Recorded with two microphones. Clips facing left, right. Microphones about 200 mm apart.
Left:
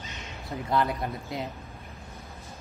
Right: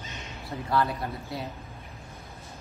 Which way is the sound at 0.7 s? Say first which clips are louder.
Even; 20° left (ahead or behind).